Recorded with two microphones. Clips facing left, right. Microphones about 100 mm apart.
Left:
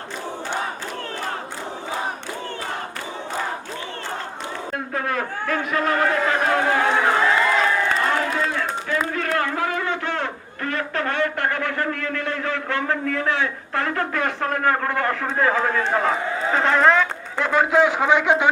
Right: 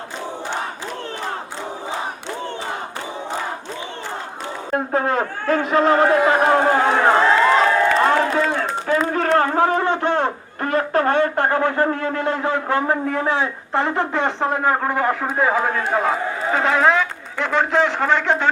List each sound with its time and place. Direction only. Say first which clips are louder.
4.7 s a man's voice: right 7 dB; 35° right (ahead or behind)
6.3 s run: right 4 dB; 35° right (ahead or behind)
7.9 s a man's voice: right 5 dB; 40° right (ahead or behind); by 18.5 s 10° left (ahead or behind)